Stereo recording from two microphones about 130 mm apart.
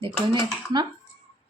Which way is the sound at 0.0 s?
40° right (ahead or behind).